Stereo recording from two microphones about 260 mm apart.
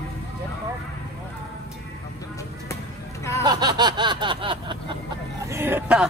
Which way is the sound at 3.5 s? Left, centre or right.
Centre.